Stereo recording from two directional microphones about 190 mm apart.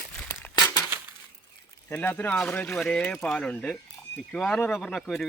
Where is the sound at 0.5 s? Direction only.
20° left (ahead or behind).